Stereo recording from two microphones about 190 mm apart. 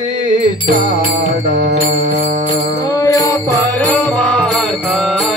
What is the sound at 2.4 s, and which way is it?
Music, 20° left (ahead or behind).